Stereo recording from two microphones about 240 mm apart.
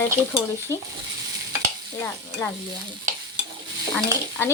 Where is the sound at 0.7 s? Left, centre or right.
Centre.